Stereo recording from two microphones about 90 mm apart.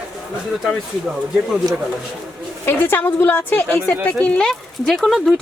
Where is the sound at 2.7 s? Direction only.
25° left (ahead or behind).